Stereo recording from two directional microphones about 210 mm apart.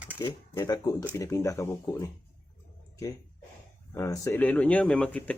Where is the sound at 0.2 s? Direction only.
20° left (ahead or behind).